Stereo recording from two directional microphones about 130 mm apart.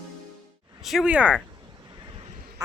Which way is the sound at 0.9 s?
5° right (ahead or behind).